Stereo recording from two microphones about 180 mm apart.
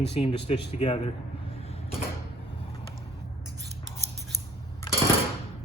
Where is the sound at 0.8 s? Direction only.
25° left (ahead or behind).